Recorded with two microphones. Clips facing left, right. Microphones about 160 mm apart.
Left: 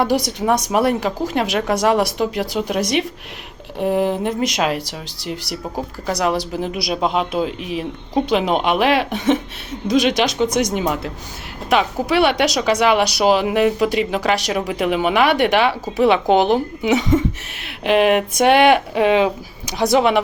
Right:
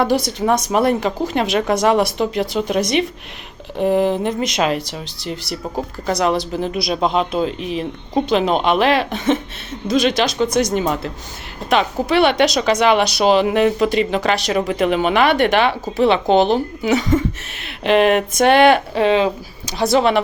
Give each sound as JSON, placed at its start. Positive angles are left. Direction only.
{"t": 0.0, "sound": "speech", "side_deg": 15}